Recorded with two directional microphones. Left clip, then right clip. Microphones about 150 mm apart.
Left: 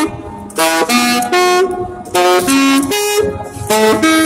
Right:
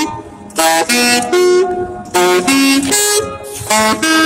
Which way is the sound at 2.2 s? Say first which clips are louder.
Left 1 dB; 5° left (ahead or behind).